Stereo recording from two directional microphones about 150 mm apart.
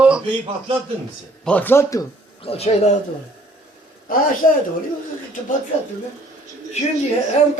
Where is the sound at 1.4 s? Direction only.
10° left (ahead or behind).